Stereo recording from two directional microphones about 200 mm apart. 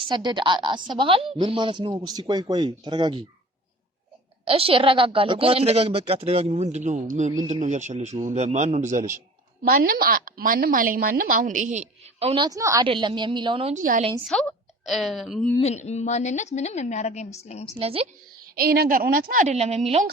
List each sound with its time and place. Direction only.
0.0 s a woman's voice: 25° right (ahead or behind)
4.4 s a woman's voice: 25° right (ahead or behind)
13.8 s a woman's voice: 40° right (ahead or behind)
14.3 s a woman's voice: centre (ahead or behind)
15.6 s a woman's voice: 35° left (ahead or behind)
17.7 s a woman's voice: 30° right (ahead or behind)
18.5 s a woman's voice: 50° right (ahead or behind); by 20.1 s 30° right (ahead or behind)